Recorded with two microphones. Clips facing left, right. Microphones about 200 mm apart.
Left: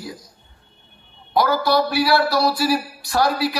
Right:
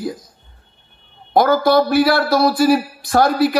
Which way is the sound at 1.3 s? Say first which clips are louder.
Right 5 dB; 50° right (ahead or behind).